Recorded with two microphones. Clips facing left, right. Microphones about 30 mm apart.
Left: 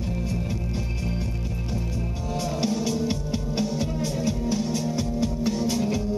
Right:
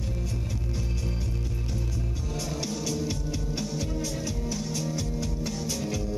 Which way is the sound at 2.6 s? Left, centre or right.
Left.